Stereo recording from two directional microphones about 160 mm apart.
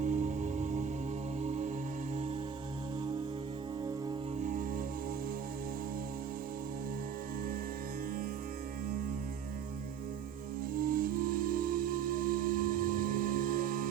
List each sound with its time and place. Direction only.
0.0 s music: 50° right (ahead or behind)
10.8 s music: 60° right (ahead or behind)